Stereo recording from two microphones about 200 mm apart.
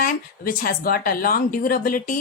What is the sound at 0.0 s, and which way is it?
A woman's voice, 45° left (ahead or behind).